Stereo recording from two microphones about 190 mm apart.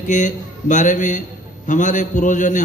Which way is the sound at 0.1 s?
40° left (ahead or behind).